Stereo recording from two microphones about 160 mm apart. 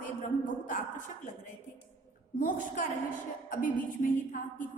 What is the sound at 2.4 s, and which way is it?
A woman's voice, 60° left (ahead or behind).